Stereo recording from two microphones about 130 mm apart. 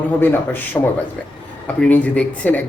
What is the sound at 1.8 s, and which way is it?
Speech, 10° left (ahead or behind).